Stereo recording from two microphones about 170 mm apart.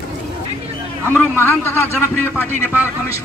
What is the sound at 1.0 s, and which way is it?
A man's voice, 10° left (ahead or behind).